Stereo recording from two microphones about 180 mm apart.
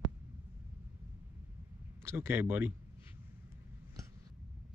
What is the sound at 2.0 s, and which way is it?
Speech, 15° right (ahead or behind).